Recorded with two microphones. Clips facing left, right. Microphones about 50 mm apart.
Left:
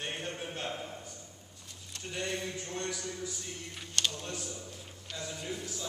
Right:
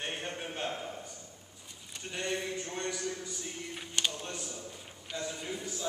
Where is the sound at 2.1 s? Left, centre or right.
Centre.